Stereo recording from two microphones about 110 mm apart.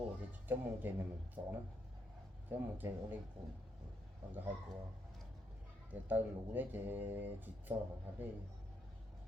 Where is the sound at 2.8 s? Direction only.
20° right (ahead or behind).